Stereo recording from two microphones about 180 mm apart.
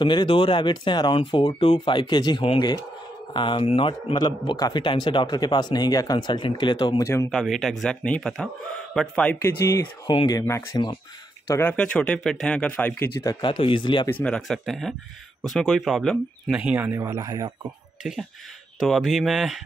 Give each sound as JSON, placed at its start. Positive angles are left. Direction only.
{"t": 0.0, "sound": "a man's voice", "side_deg": 25}
{"t": 7.2, "sound": "a man's voice", "side_deg": 0}
{"t": 10.0, "sound": "a man's voice", "side_deg": 25}
{"t": 11.4, "sound": "speech", "side_deg": 15}
{"t": 14.0, "sound": "a man's voice", "side_deg": 10}
{"t": 18.8, "sound": "a man's voice", "side_deg": 0}